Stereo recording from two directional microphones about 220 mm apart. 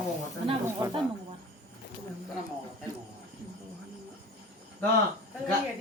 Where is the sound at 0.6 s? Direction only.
15° right (ahead or behind).